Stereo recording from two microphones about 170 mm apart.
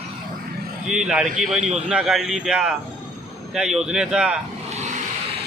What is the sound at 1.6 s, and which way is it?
Speech, 40° right (ahead or behind).